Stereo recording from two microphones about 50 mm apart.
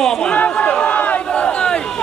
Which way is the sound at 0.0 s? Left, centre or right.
Centre.